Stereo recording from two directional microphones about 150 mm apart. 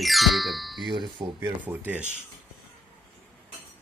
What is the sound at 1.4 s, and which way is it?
Speech, 10° right (ahead or behind).